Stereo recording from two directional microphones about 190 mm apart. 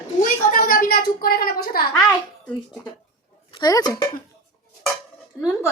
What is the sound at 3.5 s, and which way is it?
Speech, 20° left (ahead or behind).